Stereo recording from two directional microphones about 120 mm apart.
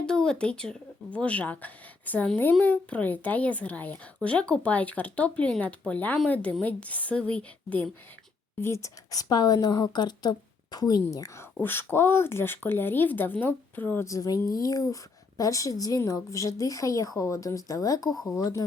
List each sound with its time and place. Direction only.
0.0 s speech: 5° left (ahead or behind)
8.6 s a woman's voice: 25° left (ahead or behind)
11.6 s speech: 20° left (ahead or behind)
14.1 s a woman's voice: 30° left (ahead or behind)
18.1 s a woman's voice: centre (ahead or behind)
18.3 s speech: 30° left (ahead or behind)